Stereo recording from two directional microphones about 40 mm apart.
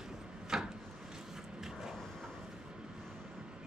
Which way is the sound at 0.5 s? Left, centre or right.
Centre.